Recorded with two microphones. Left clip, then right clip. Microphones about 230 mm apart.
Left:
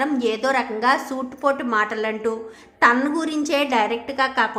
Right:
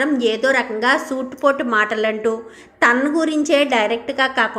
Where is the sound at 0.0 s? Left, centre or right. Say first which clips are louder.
Right 4 dB; centre.